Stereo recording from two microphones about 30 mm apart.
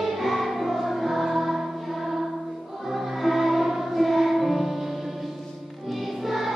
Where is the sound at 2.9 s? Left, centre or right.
Centre.